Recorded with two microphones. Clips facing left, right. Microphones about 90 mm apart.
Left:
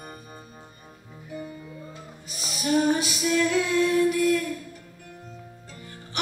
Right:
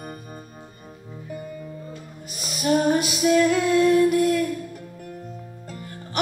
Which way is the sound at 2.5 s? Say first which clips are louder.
Right 3 dB; 45° right (ahead or behind).